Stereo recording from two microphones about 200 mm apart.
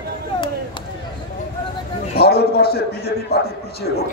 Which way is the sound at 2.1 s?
50° left (ahead or behind).